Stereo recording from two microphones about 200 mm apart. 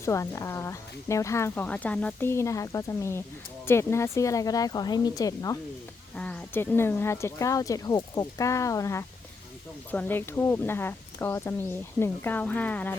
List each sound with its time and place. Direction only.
0.0 s speech: 15° left (ahead or behind)
6.1 s speech: 5° left (ahead or behind)